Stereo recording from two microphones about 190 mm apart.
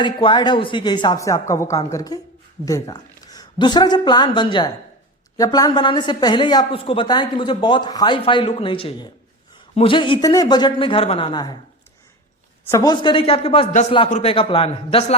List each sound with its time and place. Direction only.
0.0 s a woman's voice: 25° left (ahead or behind)
12.6 s a woman's voice: 15° left (ahead or behind)